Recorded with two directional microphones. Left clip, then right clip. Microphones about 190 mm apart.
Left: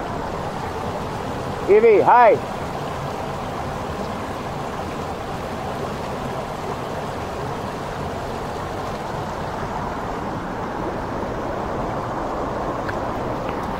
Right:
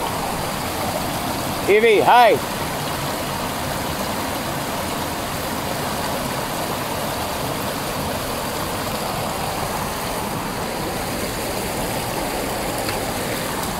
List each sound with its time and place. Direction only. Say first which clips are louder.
1.7 s speech: left 1 dB; 75° right (ahead or behind)